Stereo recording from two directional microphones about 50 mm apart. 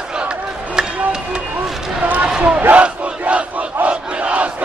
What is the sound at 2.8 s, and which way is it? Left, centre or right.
Crowd, right.